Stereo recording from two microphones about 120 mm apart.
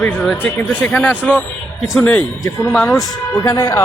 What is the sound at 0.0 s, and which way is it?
Speech, 10° left (ahead or behind).